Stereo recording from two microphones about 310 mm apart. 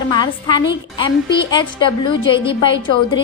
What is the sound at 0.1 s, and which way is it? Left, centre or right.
A woman's voice, centre.